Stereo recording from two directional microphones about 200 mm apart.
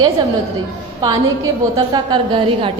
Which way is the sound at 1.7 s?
20° right (ahead or behind).